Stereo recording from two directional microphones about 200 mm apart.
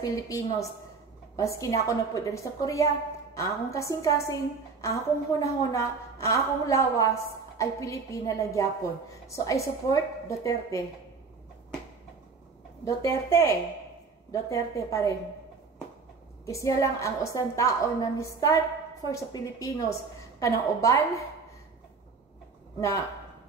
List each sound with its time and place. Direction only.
0.0 s a woman's voice: 15° left (ahead or behind)
12.8 s a woman's voice: 15° left (ahead or behind)
16.4 s a woman's voice: 15° left (ahead or behind)
22.8 s a woman's voice: 15° left (ahead or behind)